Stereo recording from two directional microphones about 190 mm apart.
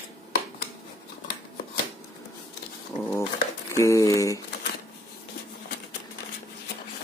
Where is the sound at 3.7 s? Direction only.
15° left (ahead or behind).